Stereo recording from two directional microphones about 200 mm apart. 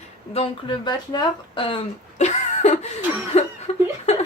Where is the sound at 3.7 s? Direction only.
30° left (ahead or behind).